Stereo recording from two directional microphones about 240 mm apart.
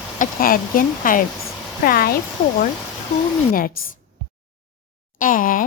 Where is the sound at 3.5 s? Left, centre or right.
Left.